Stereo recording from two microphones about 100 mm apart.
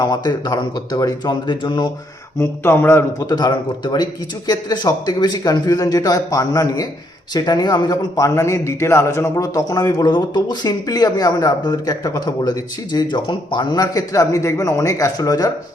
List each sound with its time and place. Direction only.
0.0 s speech: 45° left (ahead or behind)
2.4 s speech: 25° left (ahead or behind)
3.2 s a man's voice: 40° left (ahead or behind)